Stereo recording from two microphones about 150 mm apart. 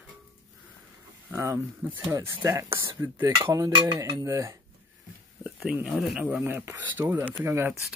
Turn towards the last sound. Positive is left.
turn(degrees=-15)  # may be behind; listen again after turning